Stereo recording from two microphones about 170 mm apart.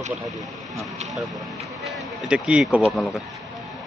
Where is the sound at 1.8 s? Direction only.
Centre (ahead or behind).